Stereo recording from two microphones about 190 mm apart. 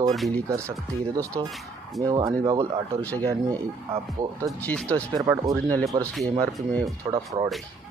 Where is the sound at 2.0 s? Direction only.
20° right (ahead or behind).